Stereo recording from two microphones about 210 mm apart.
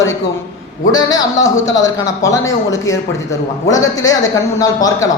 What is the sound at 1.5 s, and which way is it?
Speech, 60° left (ahead or behind).